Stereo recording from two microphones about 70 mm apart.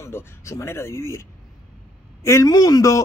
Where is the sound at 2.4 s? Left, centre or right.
Left.